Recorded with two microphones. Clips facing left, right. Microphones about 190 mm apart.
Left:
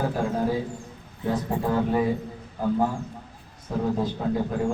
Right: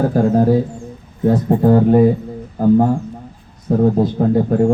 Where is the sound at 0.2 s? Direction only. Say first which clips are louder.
Right 12 dB; 40° right (ahead or behind).